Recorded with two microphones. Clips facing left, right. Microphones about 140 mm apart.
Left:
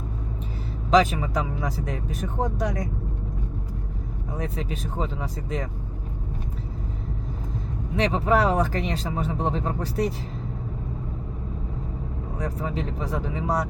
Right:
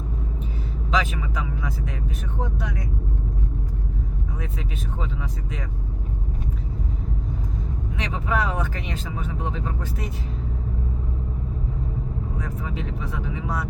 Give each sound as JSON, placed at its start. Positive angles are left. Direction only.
{"t": 0.9, "sound": "speech", "side_deg": 40}
{"t": 4.4, "sound": "speech", "side_deg": 35}
{"t": 7.9, "sound": "speech", "side_deg": 35}
{"t": 12.4, "sound": "speech", "side_deg": 35}